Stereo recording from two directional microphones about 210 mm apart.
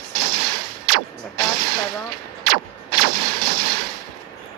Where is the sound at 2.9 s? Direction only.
45° right (ahead or behind).